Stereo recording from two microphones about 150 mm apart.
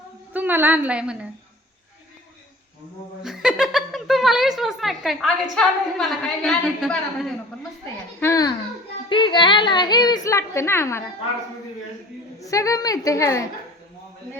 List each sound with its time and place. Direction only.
0.3 s a woman's voice: 15° right (ahead or behind)
3.2 s a woman's voice: 5° right (ahead or behind)
8.2 s a woman's voice: 20° left (ahead or behind)
9.0 s a woman's voice: 35° left (ahead or behind); by 11.0 s 15° left (ahead or behind)
12.4 s a woman's voice: 20° left (ahead or behind)